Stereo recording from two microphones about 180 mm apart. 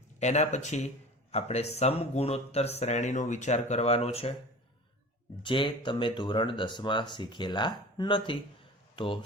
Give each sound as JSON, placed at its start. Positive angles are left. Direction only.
{"t": 0.2, "sound": "speech", "side_deg": 40}
{"t": 5.4, "sound": "speech", "side_deg": 25}